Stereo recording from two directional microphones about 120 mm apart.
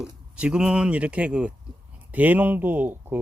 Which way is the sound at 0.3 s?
5° right (ahead or behind).